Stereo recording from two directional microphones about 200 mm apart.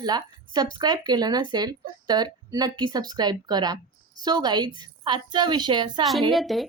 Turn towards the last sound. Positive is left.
turn(degrees=0)  # may be behind; listen again after turning